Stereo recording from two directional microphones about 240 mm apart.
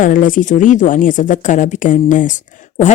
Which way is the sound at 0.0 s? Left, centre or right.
Left.